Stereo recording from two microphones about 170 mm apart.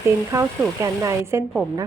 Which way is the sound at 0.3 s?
20° right (ahead or behind).